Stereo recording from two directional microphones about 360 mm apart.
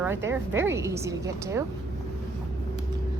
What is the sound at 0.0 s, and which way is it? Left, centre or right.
A woman's voice, centre.